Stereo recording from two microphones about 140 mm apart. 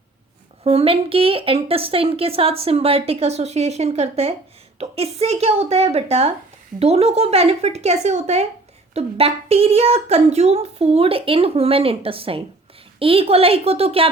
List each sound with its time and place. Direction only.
0.6 s a woman's voice: 45° right (ahead or behind)